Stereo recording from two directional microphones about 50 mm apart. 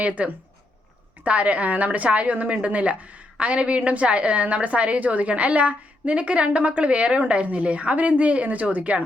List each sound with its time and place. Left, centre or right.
0.0 s a woman's voice: right